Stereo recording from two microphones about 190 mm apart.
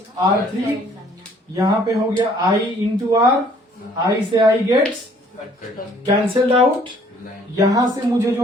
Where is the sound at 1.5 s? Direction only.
20° right (ahead or behind).